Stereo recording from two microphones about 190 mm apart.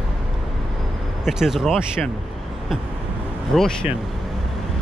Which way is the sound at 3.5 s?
Centre (ahead or behind).